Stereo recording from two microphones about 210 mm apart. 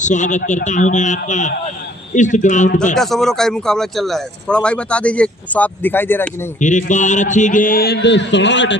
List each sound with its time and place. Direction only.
0.0 s a man's voice: 35° left (ahead or behind)
2.9 s speech: centre (ahead or behind)
6.6 s a man's voice: 35° left (ahead or behind); by 8.8 s 60° left (ahead or behind)